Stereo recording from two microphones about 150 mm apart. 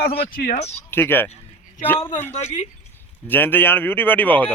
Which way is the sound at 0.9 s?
15° left (ahead or behind).